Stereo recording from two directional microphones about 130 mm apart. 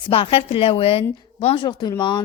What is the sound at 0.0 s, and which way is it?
A woman's voice, 45° left (ahead or behind).